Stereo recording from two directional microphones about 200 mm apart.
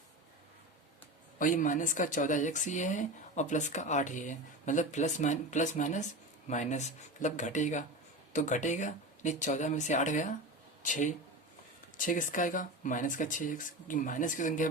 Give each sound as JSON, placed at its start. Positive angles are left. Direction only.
{"t": 1.4, "sound": "speech", "side_deg": 40}